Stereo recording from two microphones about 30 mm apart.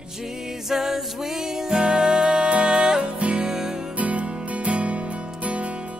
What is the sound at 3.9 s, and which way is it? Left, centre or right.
Music, right.